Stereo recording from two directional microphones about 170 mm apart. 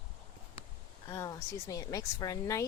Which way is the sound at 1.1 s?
20° left (ahead or behind).